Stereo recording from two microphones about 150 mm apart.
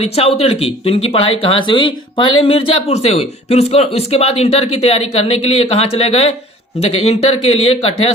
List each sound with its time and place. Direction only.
0.0 s speech: 40° left (ahead or behind)